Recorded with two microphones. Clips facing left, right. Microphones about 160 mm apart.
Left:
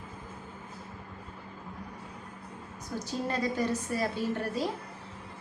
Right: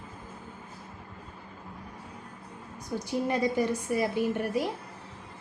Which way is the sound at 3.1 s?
15° right (ahead or behind).